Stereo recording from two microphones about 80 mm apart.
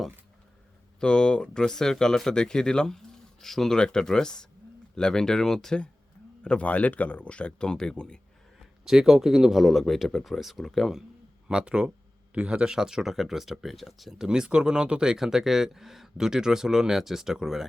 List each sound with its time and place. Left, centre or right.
0.9 s speech: centre
8.5 s speech: centre
11.4 s speech: centre